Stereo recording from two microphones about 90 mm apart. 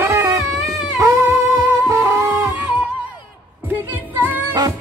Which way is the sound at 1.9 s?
35° right (ahead or behind).